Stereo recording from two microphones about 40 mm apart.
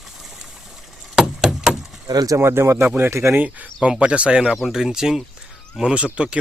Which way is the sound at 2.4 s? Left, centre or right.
Right.